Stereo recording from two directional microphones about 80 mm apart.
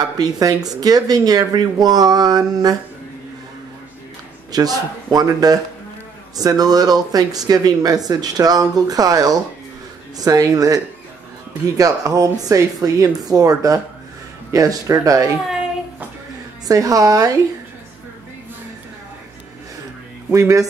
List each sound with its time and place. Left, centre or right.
0.0 s speech: right
4.5 s a man's voice: right
16.6 s speech: right
20.3 s speech: right